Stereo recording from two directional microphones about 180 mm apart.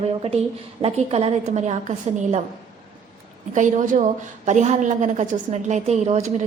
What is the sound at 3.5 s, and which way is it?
A woman's voice, 45° right (ahead or behind).